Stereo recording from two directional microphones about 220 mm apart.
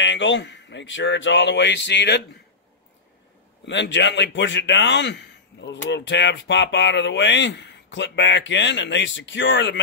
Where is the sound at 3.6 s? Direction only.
55° left (ahead or behind).